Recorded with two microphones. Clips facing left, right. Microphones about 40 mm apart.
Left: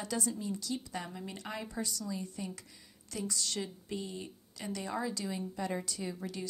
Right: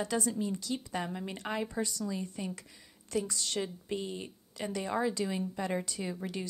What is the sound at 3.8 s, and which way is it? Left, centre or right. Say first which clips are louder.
A woman's voice: right 3 dB; right.